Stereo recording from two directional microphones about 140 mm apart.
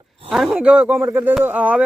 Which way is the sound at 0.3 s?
Centre (ahead or behind).